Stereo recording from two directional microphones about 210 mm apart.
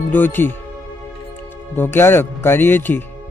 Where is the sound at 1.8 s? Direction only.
10° left (ahead or behind).